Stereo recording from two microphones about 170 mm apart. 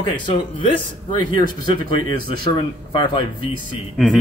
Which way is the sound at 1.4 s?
30° left (ahead or behind).